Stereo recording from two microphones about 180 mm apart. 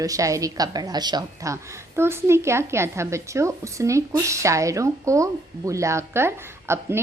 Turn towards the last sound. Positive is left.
turn(degrees=-15)  # may be behind; listen again after turning